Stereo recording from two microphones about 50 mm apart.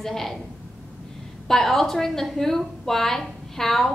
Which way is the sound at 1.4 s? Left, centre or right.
Centre.